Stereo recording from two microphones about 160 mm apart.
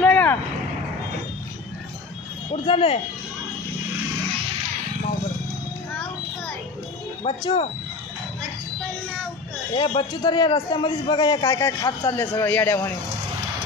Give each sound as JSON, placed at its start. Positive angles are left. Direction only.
{"t": 0.0, "sound": "vehicle", "side_deg": 10}
{"t": 2.5, "sound": "speech", "side_deg": 35}
{"t": 7.2, "sound": "speech", "side_deg": 35}
{"t": 9.8, "sound": "a man's voice", "side_deg": 30}